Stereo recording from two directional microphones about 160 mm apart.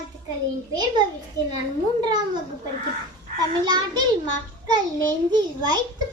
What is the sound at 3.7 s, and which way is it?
Speech, 25° right (ahead or behind).